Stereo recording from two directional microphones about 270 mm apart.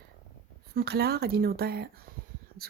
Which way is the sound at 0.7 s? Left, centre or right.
Right.